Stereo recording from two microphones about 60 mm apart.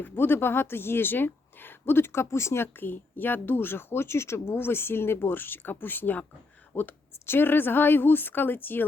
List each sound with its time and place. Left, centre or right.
0.0 s speech: left